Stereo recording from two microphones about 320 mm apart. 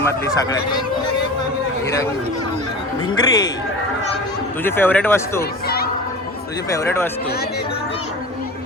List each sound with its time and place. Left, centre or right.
0.0 s speech: centre
3.1 s speech: centre
4.6 s speech: centre
5.6 s music: left
6.7 s speech: centre